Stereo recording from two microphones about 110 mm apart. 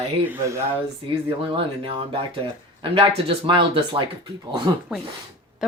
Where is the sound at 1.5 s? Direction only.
55° right (ahead or behind).